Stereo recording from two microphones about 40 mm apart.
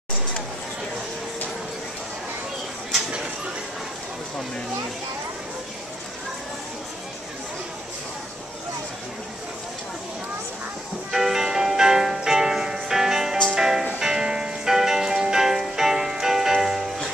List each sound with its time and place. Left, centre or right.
11.1 s music: centre